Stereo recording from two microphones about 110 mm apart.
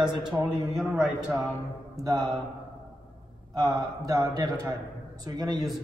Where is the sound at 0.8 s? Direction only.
5° right (ahead or behind).